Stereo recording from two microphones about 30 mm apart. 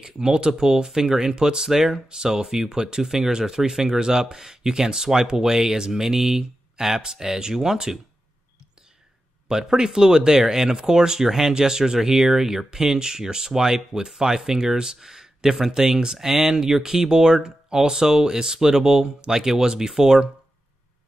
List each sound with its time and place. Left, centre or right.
0.0 s speech: right
9.5 s speech: centre